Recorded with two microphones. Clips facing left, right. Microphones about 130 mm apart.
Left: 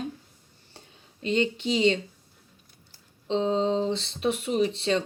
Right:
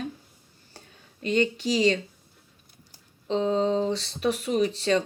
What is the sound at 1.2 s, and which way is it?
Speech, 30° left (ahead or behind).